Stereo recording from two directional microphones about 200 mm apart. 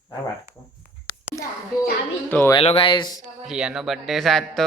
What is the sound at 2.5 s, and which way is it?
Speech, 30° left (ahead or behind).